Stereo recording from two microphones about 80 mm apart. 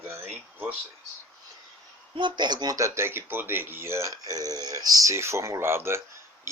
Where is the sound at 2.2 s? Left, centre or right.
Right.